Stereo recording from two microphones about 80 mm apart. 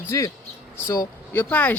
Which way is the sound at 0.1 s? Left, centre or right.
Left.